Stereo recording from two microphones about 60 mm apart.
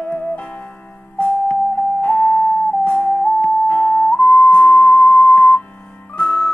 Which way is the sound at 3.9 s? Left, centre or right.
Centre.